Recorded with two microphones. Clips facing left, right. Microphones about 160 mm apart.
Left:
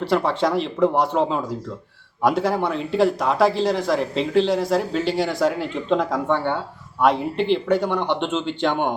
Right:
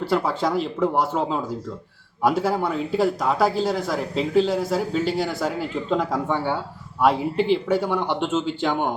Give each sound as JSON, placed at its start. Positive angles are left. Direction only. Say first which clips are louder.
{"t": 0.0, "sound": "speech", "louder": "left 2 dB", "side_deg": 0}
{"t": 7.3, "sound": "speech", "louder": "even", "side_deg": 60}
{"t": 7.7, "sound": "speech", "louder": "left 2 dB", "side_deg": -5}